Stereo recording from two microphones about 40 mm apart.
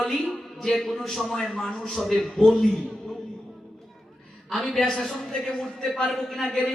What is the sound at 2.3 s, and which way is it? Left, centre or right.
Speech, centre.